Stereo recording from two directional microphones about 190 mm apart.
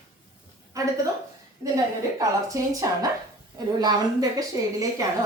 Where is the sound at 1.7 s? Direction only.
20° right (ahead or behind).